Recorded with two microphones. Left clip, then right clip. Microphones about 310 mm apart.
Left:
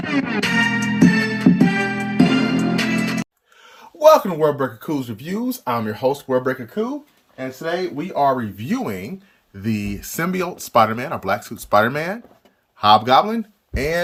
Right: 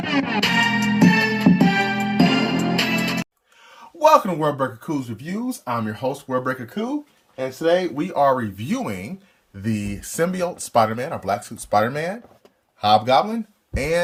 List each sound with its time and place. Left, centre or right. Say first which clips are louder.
0.0 s music: even; centre
4.0 s speech: left 3 dB; centre
7.9 s speech: even; centre